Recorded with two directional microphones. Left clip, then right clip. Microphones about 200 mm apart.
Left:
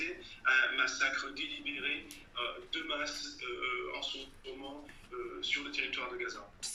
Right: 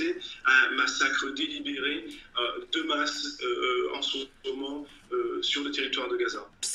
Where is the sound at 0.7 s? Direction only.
40° right (ahead or behind).